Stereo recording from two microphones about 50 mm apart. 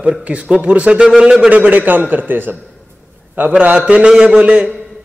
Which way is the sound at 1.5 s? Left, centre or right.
Right.